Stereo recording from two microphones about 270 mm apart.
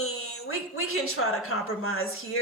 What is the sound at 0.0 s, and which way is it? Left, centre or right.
A woman's voice, left.